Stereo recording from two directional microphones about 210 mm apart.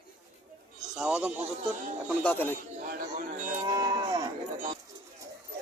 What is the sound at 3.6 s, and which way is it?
Cattle, 15° right (ahead or behind).